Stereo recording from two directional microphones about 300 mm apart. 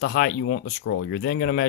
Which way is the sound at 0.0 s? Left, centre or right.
Left.